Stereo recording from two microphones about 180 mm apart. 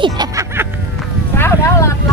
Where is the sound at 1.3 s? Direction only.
15° left (ahead or behind).